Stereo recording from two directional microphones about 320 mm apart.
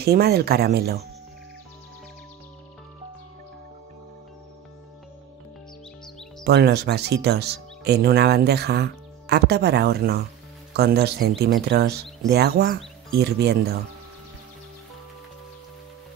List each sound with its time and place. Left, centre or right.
0.0 s speech: right
6.4 s speech: right